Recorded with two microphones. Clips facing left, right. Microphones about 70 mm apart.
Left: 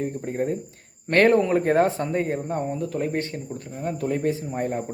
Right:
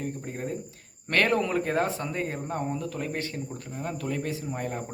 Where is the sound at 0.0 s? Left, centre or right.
Left.